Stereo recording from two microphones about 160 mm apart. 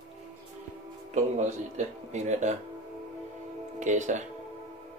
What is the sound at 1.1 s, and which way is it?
Speech, 50° right (ahead or behind).